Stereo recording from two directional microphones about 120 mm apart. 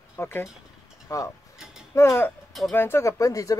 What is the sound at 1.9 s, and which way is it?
Speech, 20° left (ahead or behind).